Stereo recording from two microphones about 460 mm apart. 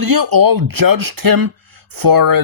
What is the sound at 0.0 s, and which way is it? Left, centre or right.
Speech, right.